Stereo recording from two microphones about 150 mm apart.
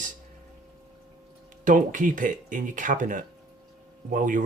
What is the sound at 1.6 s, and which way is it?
Speech, 60° right (ahead or behind).